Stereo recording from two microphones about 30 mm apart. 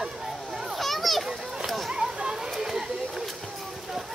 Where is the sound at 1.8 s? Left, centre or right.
Centre.